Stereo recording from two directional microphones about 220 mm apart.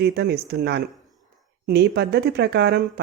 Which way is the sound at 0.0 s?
50° right (ahead or behind).